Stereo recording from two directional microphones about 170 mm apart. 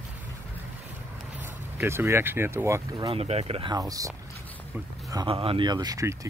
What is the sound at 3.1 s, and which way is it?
Speech, 35° right (ahead or behind).